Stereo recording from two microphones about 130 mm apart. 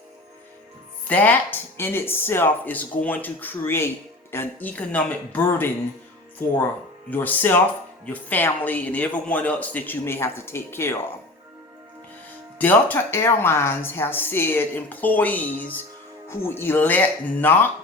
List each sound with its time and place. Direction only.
1.0 s speech: 15° left (ahead or behind)
7.1 s speech: 15° left (ahead or behind)
12.5 s speech: 15° left (ahead or behind)